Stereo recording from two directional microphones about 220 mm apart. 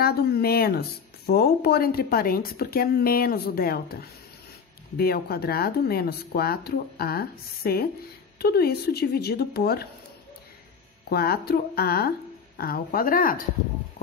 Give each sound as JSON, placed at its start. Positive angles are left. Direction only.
{"t": 0.0, "sound": "speech", "side_deg": 45}
{"t": 11.1, "sound": "speech", "side_deg": 45}